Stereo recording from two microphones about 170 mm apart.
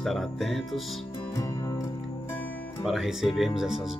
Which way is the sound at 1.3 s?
20° left (ahead or behind).